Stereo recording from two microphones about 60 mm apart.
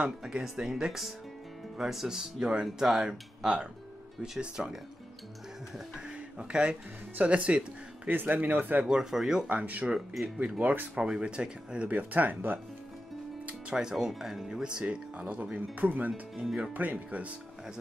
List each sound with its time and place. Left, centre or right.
0.2 s speech: centre
5.9 s speech: centre
8.1 s speech: right
8.8 s speech: centre
9.5 s speech: right
9.9 s speech: centre
10.6 s speech: right
11.0 s speech: centre; by 12.5 s right
13.7 s speech: centre